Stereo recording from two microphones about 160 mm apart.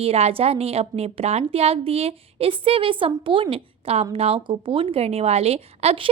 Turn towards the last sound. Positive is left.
turn(degrees=-40)  # may be behind; listen again after turning